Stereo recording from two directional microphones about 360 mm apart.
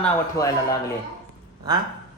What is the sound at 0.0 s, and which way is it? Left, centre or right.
Speech, centre.